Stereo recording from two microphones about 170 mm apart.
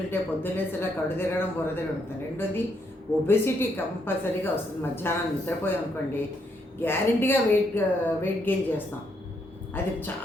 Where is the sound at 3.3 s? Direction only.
15° left (ahead or behind).